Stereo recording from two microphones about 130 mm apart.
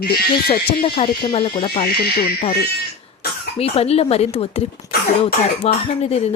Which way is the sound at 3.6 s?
50° left (ahead or behind).